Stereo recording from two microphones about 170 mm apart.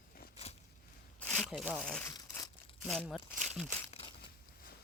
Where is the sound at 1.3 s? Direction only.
Centre (ahead or behind).